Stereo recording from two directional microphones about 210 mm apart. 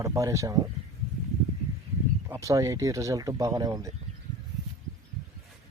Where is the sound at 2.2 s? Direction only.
15° right (ahead or behind).